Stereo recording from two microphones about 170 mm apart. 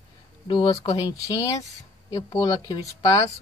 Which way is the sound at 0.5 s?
25° left (ahead or behind).